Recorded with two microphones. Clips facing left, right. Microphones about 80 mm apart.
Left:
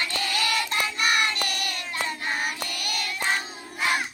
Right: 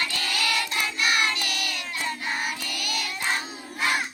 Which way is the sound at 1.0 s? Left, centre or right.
Left.